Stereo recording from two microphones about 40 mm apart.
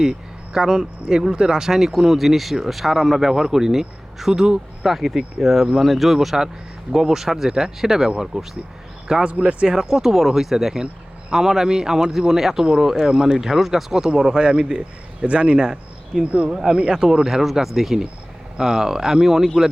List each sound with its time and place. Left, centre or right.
0.0 s speech: centre
4.4 s speech: right
4.9 s speech: centre
9.2 s speech: right
9.8 s speech: centre
16.2 s speech: right
16.6 s speech: centre